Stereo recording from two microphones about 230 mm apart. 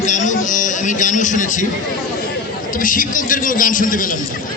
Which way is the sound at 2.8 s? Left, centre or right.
Left.